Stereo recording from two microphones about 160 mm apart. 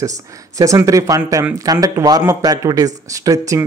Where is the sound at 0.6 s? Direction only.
20° right (ahead or behind).